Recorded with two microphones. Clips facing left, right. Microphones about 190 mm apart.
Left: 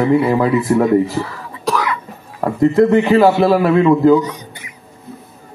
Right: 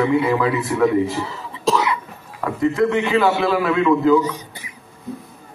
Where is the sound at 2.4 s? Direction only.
40° left (ahead or behind).